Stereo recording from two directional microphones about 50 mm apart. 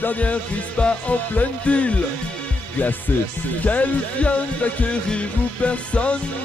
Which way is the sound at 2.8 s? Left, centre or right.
Left.